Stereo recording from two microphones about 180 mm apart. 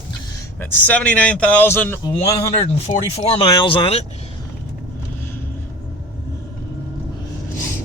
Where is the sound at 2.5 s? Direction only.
35° left (ahead or behind).